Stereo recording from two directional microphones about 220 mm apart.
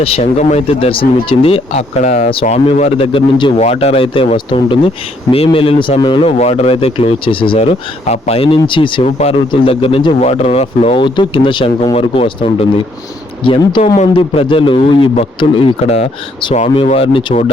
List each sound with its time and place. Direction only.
0.0 s a man's voice: 30° left (ahead or behind)